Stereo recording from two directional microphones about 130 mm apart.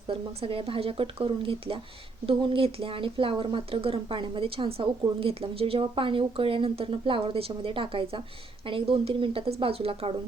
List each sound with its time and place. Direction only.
0.1 s speech: 45° right (ahead or behind)